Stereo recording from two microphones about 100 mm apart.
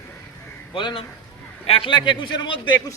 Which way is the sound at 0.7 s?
60° left (ahead or behind).